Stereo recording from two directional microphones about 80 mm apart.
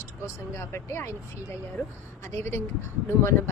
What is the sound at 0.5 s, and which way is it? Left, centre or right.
A woman's voice, left.